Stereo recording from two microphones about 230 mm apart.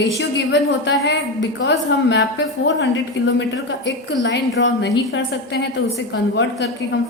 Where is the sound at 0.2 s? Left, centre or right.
Left.